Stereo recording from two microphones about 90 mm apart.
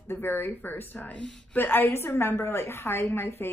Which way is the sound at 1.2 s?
5° left (ahead or behind).